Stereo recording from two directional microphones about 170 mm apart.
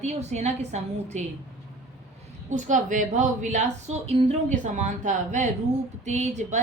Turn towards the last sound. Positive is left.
turn(degrees=-40)  # may be behind; listen again after turning